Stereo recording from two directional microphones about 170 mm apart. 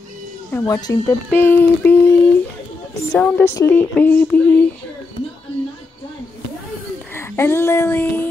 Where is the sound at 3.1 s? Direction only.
10° left (ahead or behind).